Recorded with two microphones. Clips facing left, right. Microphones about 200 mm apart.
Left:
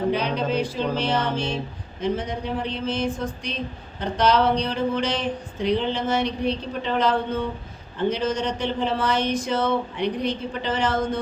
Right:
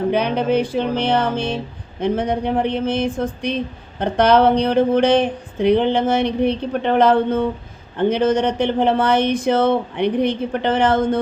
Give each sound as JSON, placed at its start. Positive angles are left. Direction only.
{"t": 0.1, "sound": "speech", "side_deg": -60}